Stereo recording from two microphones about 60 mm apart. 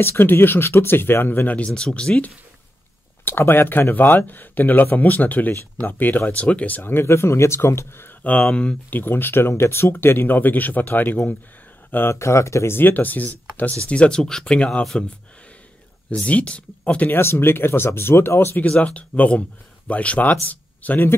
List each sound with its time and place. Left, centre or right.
0.0 s speech: left
1.7 s speech: centre
3.3 s speech: left
6.8 s speech: left
8.2 s speech: left
8.9 s speech: left
12.2 s speech: left
12.7 s speech: left
13.8 s speech: centre
16.3 s speech: left
17.1 s speech: left
18.7 s speech: left